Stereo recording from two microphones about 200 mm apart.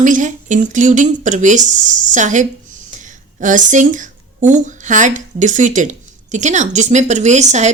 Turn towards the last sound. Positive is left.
turn(degrees=-35)  # may be behind; listen again after turning